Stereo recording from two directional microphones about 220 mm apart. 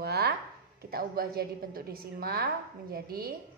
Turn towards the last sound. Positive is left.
turn(degrees=-45)  # may be behind; listen again after turning